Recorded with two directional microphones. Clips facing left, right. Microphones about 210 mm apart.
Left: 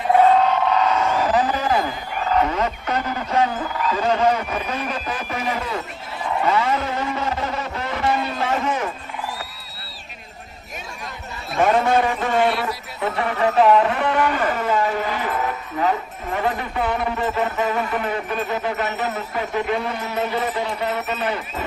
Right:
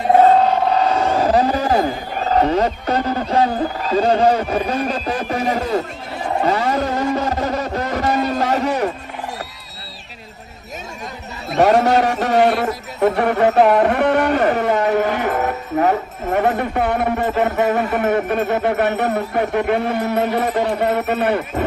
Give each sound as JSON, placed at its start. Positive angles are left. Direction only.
{"t": 0.1, "sound": "speech", "side_deg": -40}
{"t": 6.2, "sound": "vehicle", "side_deg": -40}
{"t": 11.5, "sound": "a man's voice", "side_deg": -40}
{"t": 11.9, "sound": "a man's voice", "side_deg": -70}
{"t": 12.4, "sound": "music", "side_deg": -45}
{"t": 15.9, "sound": "speech", "side_deg": -55}